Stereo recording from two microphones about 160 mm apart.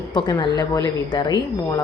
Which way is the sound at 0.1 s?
30° left (ahead or behind).